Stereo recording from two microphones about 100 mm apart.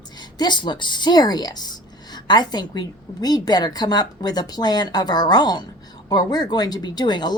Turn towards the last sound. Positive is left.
turn(degrees=45)  # may be behind; listen again after turning